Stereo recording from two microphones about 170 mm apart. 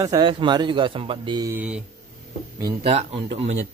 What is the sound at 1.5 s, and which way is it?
Speech, 10° right (ahead or behind).